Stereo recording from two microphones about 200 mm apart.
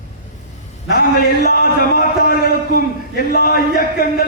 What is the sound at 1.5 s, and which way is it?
A man's voice, 50° left (ahead or behind).